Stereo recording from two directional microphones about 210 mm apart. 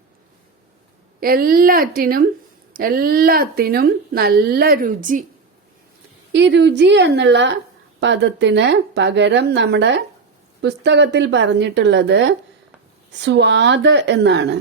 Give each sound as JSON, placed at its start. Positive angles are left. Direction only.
{"t": 1.2, "sound": "speech", "side_deg": -45}
{"t": 6.3, "sound": "speech", "side_deg": -55}